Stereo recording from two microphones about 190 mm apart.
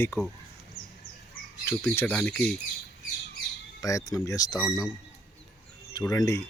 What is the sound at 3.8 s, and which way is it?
Speech, 20° left (ahead or behind).